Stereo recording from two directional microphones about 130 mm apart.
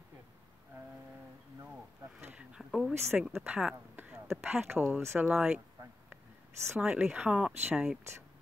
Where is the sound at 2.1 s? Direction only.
10° right (ahead or behind).